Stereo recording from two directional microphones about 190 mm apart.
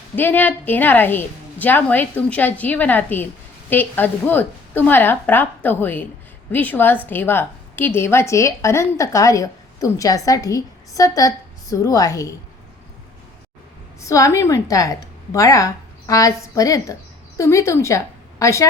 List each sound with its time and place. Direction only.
0.2 s a woman's voice: 10° left (ahead or behind)
14.0 s a woman's voice: 15° left (ahead or behind)